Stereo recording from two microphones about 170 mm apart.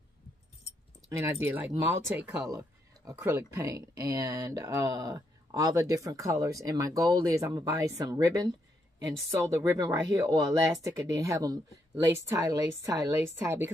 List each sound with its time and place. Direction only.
1.2 s a woman's voice: 10° right (ahead or behind)